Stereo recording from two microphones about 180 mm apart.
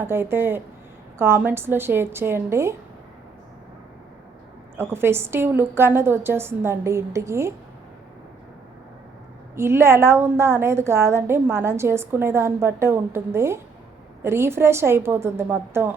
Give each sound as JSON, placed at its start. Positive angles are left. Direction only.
{"t": 0.1, "sound": "a woman's voice", "side_deg": -10}
{"t": 4.8, "sound": "a woman's voice", "side_deg": -15}
{"t": 9.6, "sound": "a woman's voice", "side_deg": -15}